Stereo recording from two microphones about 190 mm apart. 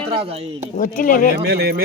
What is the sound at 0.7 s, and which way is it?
Speech, 45° left (ahead or behind).